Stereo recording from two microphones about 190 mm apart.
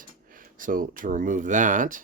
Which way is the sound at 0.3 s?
45° right (ahead or behind).